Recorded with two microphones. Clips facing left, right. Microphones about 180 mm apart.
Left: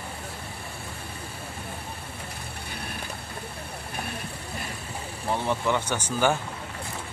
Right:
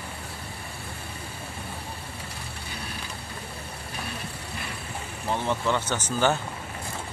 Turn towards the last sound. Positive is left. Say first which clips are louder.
# even
turn(degrees=10)  # may be behind; listen again after turning